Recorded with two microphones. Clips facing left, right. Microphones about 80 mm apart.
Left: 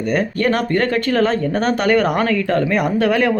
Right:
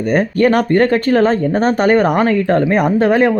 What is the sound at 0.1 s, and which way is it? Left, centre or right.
Speech, right.